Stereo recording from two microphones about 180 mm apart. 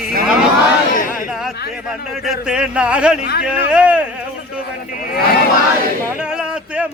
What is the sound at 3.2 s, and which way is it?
Speech, 60° left (ahead or behind).